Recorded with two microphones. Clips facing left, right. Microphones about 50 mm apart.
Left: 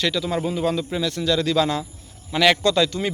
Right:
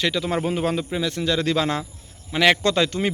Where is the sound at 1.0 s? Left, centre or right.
Right.